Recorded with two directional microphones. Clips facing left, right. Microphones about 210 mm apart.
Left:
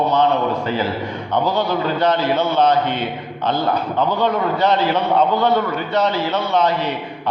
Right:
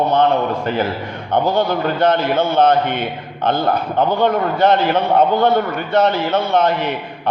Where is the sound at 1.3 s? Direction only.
50° right (ahead or behind).